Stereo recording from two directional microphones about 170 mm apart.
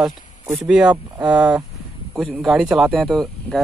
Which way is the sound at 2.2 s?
Centre (ahead or behind).